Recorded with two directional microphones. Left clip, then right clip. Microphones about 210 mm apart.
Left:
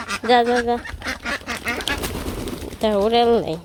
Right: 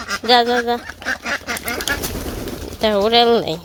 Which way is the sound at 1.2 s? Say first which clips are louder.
Right 3 dB; centre (ahead or behind).